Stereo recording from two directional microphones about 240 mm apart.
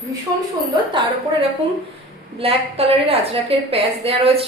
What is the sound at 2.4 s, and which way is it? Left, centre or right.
A woman's voice, right.